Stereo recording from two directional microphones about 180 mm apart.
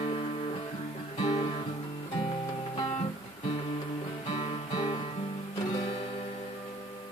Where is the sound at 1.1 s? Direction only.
25° left (ahead or behind).